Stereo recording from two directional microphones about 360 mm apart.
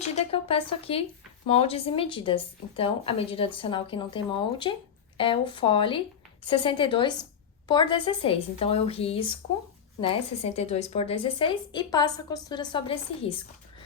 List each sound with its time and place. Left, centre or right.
0.0 s a woman's voice: centre